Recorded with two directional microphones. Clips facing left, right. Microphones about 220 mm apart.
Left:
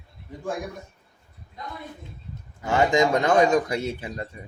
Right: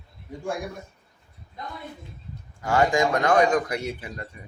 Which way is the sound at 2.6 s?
20° left (ahead or behind).